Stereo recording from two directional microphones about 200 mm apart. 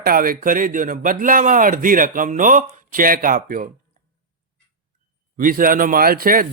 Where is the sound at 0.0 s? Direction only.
45° right (ahead or behind).